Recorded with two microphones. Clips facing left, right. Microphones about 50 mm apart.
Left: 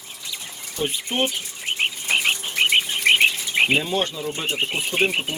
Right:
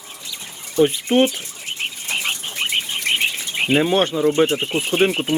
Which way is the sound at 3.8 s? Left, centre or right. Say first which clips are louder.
Right 6 dB; right.